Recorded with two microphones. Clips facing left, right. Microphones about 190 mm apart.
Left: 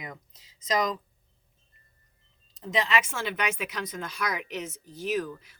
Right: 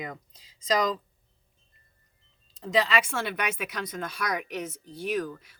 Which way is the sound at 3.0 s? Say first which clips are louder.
Even; 55° right (ahead or behind).